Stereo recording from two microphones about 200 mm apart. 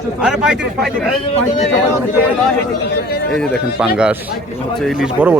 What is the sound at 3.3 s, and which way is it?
A man's voice, centre (ahead or behind).